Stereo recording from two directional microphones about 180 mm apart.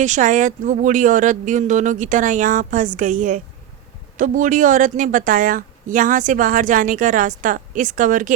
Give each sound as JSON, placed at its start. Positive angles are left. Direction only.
{"t": 0.0, "sound": "a woman's voice", "side_deg": -45}